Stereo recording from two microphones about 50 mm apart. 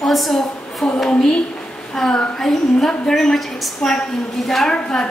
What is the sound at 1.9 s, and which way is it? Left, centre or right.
A woman's voice, centre.